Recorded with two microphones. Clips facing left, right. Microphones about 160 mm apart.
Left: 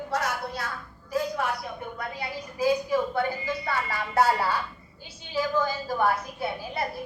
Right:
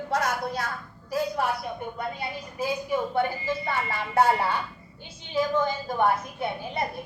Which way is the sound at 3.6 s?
20° right (ahead or behind).